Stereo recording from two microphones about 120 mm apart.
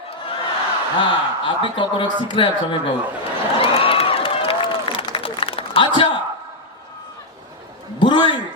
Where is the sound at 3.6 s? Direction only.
50° left (ahead or behind).